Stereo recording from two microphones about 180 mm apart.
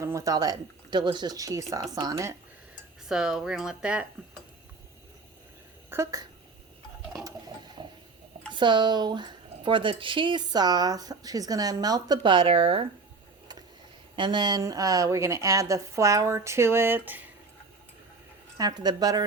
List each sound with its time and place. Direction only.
0.0 s speech: 15° right (ahead or behind)
3.1 s speech: 5° right (ahead or behind)
5.9 s a woman's voice: 15° right (ahead or behind)
7.3 s ratchet: 25° right (ahead or behind)
8.5 s speech: 25° right (ahead or behind)
14.2 s a woman's voice: 25° right (ahead or behind)
18.5 s speech: 20° right (ahead or behind)